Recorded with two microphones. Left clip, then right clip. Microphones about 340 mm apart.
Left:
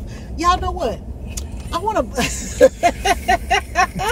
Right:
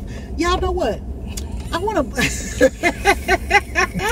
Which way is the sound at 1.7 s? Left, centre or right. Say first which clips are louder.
Left 1 dB; centre.